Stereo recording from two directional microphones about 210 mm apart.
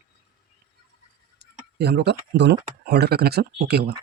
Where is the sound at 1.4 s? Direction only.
50° right (ahead or behind).